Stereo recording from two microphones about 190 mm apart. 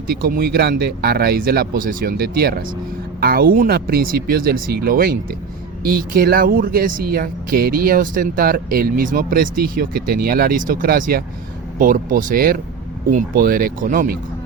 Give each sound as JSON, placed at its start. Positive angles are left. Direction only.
{"t": 0.1, "sound": "speech", "side_deg": -50}